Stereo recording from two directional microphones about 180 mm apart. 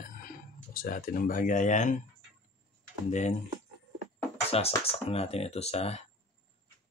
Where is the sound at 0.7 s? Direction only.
50° left (ahead or behind).